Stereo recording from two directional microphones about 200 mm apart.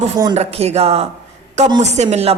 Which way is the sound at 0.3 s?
30° right (ahead or behind).